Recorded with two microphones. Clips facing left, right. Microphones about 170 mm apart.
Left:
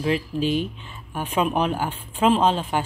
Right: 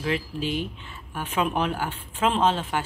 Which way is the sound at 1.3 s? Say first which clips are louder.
Left 3 dB; 20° left (ahead or behind).